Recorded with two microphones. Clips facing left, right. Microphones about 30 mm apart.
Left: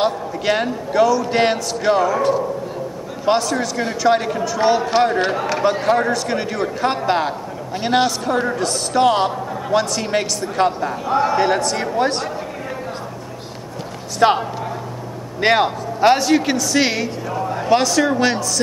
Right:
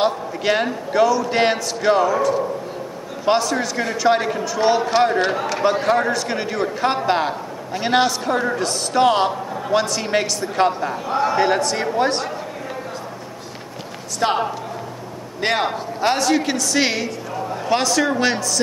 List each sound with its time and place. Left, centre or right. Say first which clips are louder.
0.0 s a man's voice: even; centre
3.3 s a man's voice: left 1 dB; centre
14.2 s speech: left 5 dB; left
15.4 s a man's voice: left 4 dB; centre